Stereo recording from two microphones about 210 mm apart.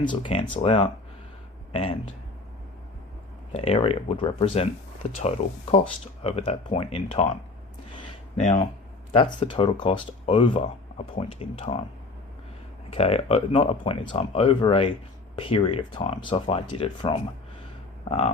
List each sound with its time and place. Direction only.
0.0 s speech: 25° left (ahead or behind)
3.5 s speech: 30° left (ahead or behind)
5.7 s speech: 30° left (ahead or behind)
8.4 s speech: 35° left (ahead or behind)
9.1 s speech: 25° left (ahead or behind)
12.9 s speech: 30° left (ahead or behind)